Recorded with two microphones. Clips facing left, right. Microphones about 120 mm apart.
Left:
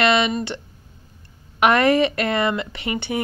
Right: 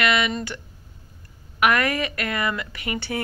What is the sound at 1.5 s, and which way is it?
Speech, 25° left (ahead or behind).